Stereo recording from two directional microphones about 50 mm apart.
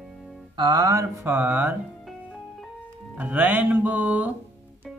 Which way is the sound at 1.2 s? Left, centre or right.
Right.